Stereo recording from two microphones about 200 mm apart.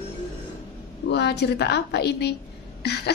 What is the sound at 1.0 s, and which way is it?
A woman's voice, 55° left (ahead or behind).